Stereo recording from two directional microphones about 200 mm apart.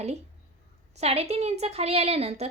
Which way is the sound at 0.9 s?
30° right (ahead or behind).